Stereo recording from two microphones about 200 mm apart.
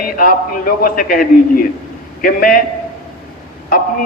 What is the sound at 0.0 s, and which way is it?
A man's voice, 45° left (ahead or behind).